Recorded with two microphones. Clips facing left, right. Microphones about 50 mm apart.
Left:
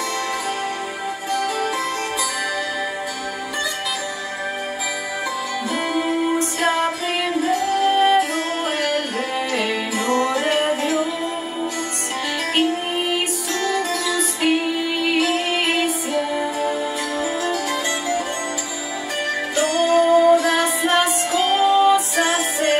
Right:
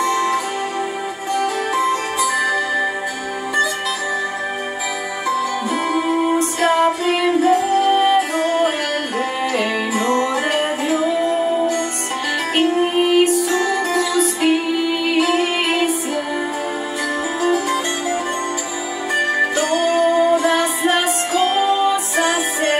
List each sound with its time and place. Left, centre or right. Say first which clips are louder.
0.0 s music: right 6 dB; centre
5.3 s music: right 8 dB; centre
17.4 s music: right 4 dB; centre